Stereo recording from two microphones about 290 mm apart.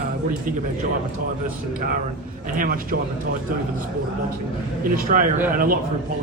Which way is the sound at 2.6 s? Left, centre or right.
Right.